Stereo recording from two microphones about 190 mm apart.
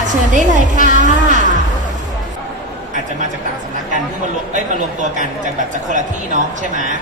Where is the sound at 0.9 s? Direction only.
40° right (ahead or behind).